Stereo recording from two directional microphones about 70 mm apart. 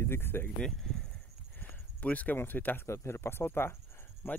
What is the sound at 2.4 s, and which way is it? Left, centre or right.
Speech, left.